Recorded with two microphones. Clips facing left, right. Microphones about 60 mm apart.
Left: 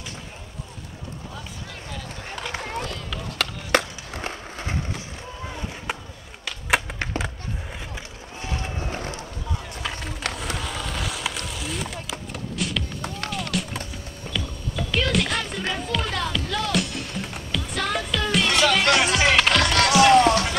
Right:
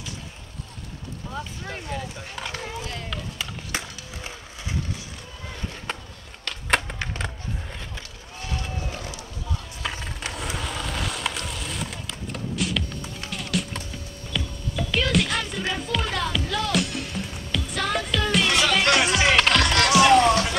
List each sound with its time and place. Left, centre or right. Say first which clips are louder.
2.7 s run: left 3 dB; left
3.3 s skateboard: left 13 dB; left
5.9 s a sound: left 2 dB; centre
8.4 s run: left 2 dB; left
8.9 s run: left 4 dB; left
9.8 s skateboard: left 1 dB; centre
13.3 s music: right 2 dB; centre